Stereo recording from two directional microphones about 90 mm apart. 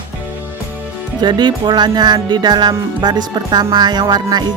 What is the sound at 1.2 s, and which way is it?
Music, 55° right (ahead or behind).